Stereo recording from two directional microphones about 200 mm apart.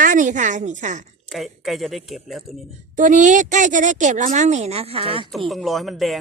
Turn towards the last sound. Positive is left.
turn(degrees=0)  # may be behind; listen again after turning